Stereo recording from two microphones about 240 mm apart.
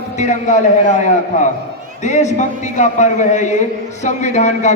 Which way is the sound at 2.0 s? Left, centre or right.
Left.